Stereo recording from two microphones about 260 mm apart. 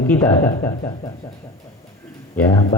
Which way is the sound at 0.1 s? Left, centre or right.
Centre.